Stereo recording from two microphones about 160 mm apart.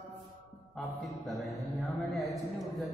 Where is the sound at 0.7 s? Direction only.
Centre (ahead or behind).